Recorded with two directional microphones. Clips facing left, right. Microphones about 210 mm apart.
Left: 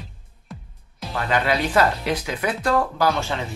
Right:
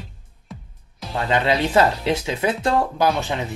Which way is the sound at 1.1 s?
25° right (ahead or behind).